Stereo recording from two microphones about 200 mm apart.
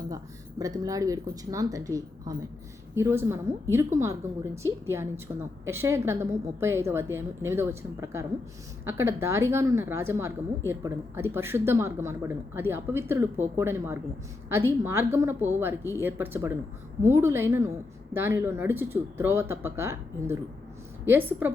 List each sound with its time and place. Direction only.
0.6 s a woman's voice: 15° right (ahead or behind)